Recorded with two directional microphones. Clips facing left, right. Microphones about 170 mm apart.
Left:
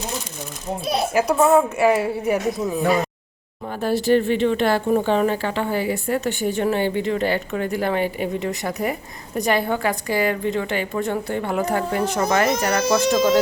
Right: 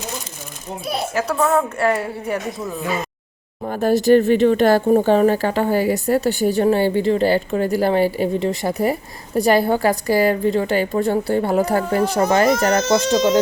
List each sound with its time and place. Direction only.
1.1 s a woman's voice: 10° left (ahead or behind)
3.6 s speech: 45° right (ahead or behind)